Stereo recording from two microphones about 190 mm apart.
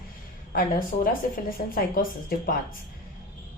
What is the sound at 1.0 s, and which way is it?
A woman's voice, 50° left (ahead or behind).